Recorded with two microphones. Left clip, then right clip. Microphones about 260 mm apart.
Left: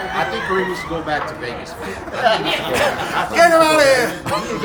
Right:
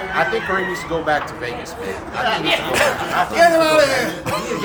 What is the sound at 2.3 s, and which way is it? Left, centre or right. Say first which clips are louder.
Speech: left 5 dB; left.